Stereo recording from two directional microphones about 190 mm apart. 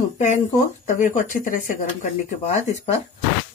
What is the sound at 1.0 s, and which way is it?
Speech, 45° left (ahead or behind).